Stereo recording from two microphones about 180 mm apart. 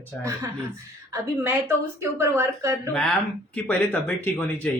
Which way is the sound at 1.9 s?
15° right (ahead or behind).